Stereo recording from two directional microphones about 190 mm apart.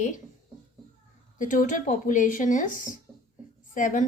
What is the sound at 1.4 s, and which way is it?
A woman's voice, 45° left (ahead or behind).